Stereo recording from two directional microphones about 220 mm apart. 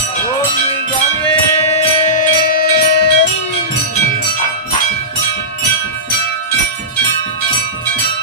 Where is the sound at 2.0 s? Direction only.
40° left (ahead or behind).